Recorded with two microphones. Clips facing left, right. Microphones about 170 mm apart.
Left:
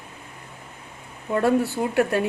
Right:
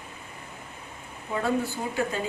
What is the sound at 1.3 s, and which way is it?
Speech, 70° left (ahead or behind).